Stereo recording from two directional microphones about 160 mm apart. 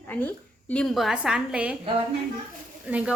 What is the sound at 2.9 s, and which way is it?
Speech, 10° right (ahead or behind).